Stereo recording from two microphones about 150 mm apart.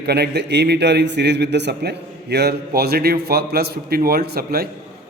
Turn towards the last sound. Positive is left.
turn(degrees=-90)